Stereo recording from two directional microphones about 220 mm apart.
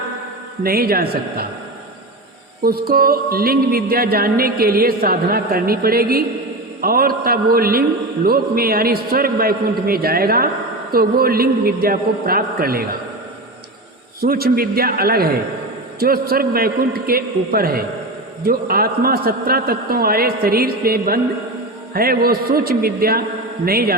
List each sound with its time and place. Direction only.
0.6 s a man's voice: 45° right (ahead or behind)
2.6 s a man's voice: 40° right (ahead or behind)
14.2 s a man's voice: 45° right (ahead or behind)